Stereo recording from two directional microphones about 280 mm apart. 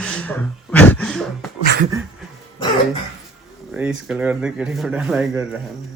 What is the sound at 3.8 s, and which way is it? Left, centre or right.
Speech, centre.